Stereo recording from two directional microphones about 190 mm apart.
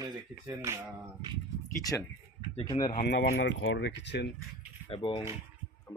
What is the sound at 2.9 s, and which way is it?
Speech, 55° left (ahead or behind).